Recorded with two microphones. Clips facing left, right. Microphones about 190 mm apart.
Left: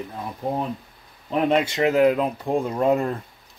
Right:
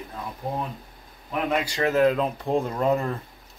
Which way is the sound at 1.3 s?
25° left (ahead or behind).